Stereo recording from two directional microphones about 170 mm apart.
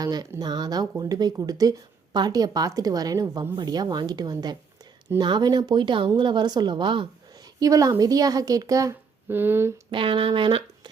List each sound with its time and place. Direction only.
0.0 s speech: 20° right (ahead or behind)
9.9 s speech: 30° right (ahead or behind)